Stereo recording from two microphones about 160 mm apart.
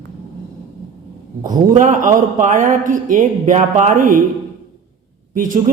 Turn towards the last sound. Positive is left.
turn(degrees=-55)  # may be behind; listen again after turning